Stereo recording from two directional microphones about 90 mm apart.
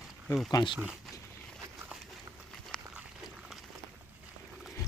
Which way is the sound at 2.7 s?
5° left (ahead or behind).